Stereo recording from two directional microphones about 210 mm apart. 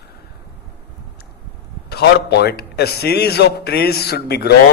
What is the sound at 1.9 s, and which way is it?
A man's voice, 50° left (ahead or behind).